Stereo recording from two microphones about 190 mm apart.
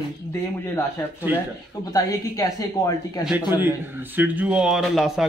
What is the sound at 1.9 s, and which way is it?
Speech, 20° left (ahead or behind).